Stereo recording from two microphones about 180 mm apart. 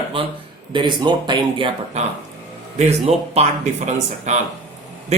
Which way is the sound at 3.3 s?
40° right (ahead or behind).